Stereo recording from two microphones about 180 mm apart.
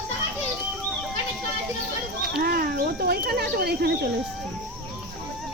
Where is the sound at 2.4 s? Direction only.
60° right (ahead or behind).